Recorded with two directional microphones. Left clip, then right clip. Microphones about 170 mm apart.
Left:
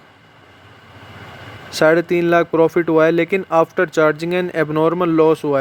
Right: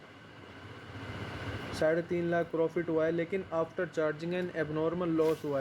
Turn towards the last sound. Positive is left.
turn(degrees=65)  # may be behind; listen again after turning